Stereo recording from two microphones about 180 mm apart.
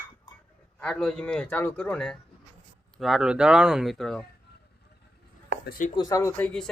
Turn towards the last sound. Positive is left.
turn(degrees=5)  # may be behind; listen again after turning